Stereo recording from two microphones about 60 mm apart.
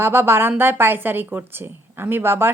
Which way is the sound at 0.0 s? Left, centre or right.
Right.